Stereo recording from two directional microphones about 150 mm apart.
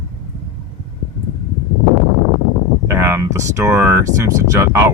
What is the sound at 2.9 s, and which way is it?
Speech, 15° right (ahead or behind).